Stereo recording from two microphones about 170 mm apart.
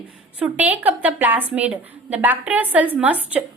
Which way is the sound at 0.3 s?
10° right (ahead or behind).